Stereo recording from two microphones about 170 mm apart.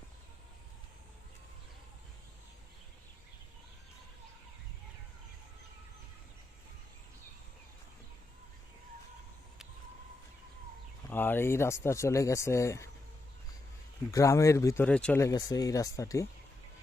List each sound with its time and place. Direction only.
11.1 s speech: 10° left (ahead or behind)
14.1 s speech: 20° left (ahead or behind)
15.2 s speech: 20° left (ahead or behind)